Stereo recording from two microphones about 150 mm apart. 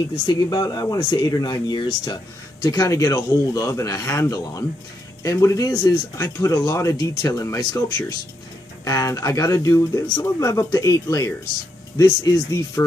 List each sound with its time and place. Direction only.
0.1 s speech: 25° left (ahead or behind)
8.8 s speech: 20° left (ahead or behind)